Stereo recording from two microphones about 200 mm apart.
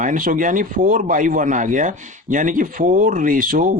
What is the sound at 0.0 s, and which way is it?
Speech, 40° right (ahead or behind).